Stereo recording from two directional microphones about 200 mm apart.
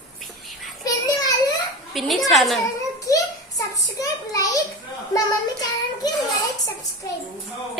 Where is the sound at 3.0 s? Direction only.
15° left (ahead or behind).